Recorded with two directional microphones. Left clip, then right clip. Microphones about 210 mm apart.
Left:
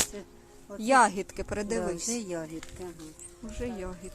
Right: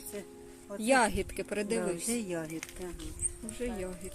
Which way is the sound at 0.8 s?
Centre (ahead or behind).